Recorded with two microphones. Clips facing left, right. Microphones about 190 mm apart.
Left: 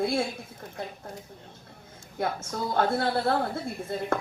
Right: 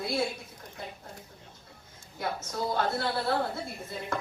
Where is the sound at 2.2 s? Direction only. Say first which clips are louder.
Left 3 dB; 55° left (ahead or behind).